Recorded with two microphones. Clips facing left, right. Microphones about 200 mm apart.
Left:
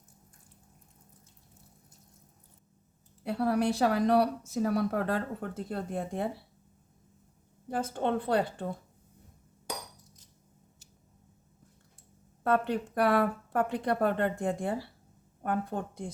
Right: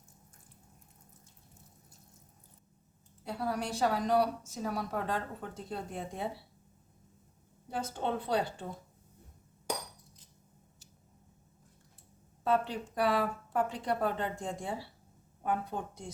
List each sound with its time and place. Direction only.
3.2 s a woman's voice: 65° left (ahead or behind)
7.7 s a woman's voice: 55° left (ahead or behind)
12.4 s a woman's voice: 60° left (ahead or behind)